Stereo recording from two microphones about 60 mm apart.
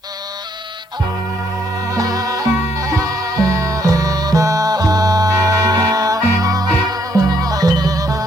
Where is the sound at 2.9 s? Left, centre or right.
Right.